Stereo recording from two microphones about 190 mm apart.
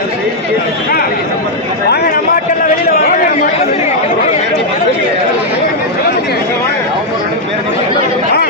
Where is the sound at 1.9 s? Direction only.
55° left (ahead or behind); by 3.9 s 40° left (ahead or behind).